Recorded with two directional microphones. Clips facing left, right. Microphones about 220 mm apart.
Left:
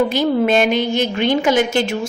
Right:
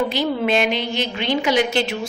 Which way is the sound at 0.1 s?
45° left (ahead or behind).